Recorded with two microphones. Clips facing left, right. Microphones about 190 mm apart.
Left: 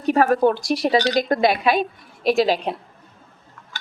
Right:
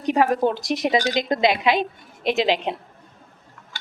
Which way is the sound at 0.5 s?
20° right (ahead or behind).